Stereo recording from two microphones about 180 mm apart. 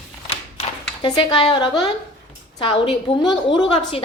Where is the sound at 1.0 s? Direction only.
25° left (ahead or behind).